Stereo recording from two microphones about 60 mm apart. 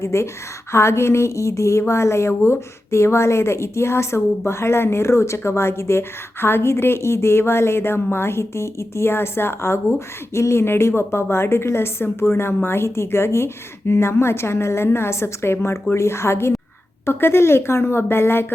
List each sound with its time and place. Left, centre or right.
0.0 s a woman's voice: left